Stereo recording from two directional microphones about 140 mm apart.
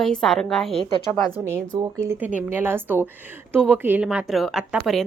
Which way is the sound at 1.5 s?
20° right (ahead or behind).